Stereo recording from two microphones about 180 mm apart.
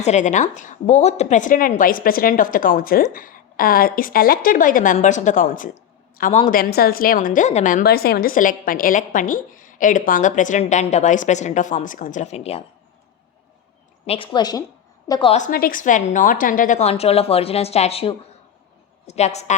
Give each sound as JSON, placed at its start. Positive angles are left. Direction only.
{"t": 0.0, "sound": "a woman's voice", "side_deg": 40}
{"t": 6.6, "sound": "a woman's voice", "side_deg": 60}
{"t": 14.1, "sound": "a woman's voice", "side_deg": 25}
{"t": 15.3, "sound": "a woman's voice", "side_deg": 45}